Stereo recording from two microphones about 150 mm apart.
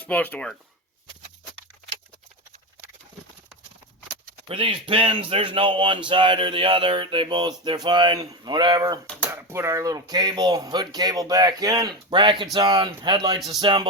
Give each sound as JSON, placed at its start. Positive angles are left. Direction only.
{"t": 0.0, "sound": "speech", "side_deg": 10}
{"t": 4.4, "sound": "speech", "side_deg": -40}